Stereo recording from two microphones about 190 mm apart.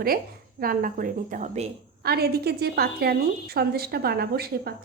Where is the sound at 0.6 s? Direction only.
45° right (ahead or behind).